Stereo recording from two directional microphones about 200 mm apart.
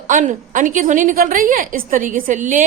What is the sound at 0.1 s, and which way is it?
A woman's voice, 40° right (ahead or behind).